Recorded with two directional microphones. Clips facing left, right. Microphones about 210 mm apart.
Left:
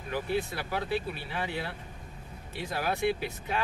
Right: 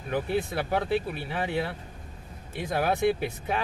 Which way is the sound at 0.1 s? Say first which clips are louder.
Right 3 dB; 50° right (ahead or behind).